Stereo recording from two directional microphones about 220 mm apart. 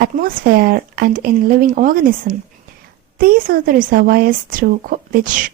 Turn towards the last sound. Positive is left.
turn(degrees=-40)  # may be behind; listen again after turning